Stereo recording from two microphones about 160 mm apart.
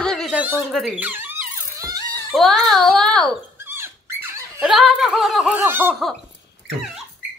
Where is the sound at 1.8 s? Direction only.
20° right (ahead or behind).